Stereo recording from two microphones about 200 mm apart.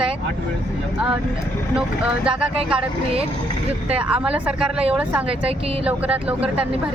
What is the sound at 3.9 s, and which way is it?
Speech, 5° right (ahead or behind).